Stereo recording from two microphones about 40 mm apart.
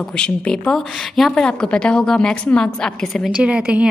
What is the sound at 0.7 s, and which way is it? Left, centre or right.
Speech, centre.